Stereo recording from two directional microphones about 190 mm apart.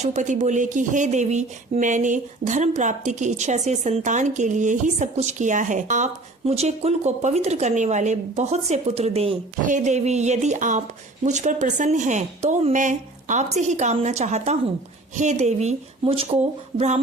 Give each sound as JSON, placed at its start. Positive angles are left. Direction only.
{"t": 0.0, "sound": "speech", "side_deg": -40}